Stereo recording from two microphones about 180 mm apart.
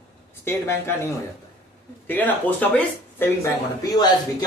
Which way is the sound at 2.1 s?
10° left (ahead or behind).